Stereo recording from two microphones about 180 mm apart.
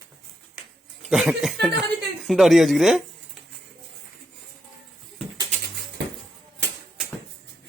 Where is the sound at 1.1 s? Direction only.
Centre (ahead or behind).